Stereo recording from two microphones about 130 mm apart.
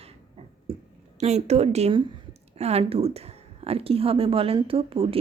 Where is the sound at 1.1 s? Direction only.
60° right (ahead or behind).